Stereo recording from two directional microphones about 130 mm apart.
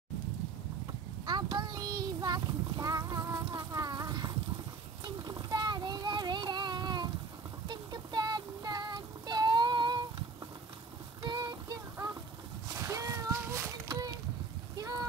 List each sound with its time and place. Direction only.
1.2 s child singing: 35° right (ahead or behind)
5.0 s a sound: 30° right (ahead or behind)
7.6 s child singing: 35° right (ahead or behind)
11.2 s child singing: 30° right (ahead or behind)
12.7 s cat: 20° right (ahead or behind)
13.8 s a sound: 30° right (ahead or behind)